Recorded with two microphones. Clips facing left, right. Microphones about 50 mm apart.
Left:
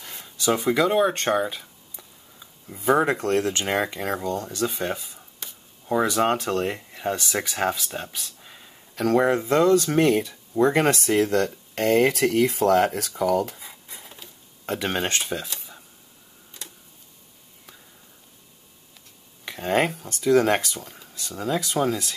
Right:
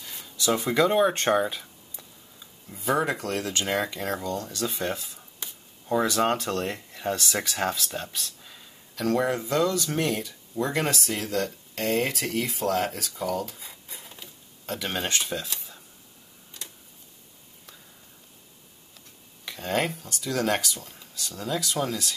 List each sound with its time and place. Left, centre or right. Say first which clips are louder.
0.2 s a sound: left 2 dB; left
0.6 s speech: left 1 dB; centre
3.0 s speech: left 6 dB; left
8.9 s speech: left 5 dB; left
12.0 s speech: left 8 dB; left
13.8 s a sound: left 1 dB; centre
14.7 s speech: left 4 dB; left
15.4 s speech: left 1 dB; centre
19.4 s speech: left 5 dB; left